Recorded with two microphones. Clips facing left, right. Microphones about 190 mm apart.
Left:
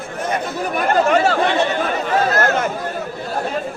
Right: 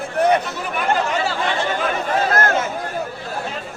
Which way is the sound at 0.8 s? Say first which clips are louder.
Left 5 dB; 55° left (ahead or behind).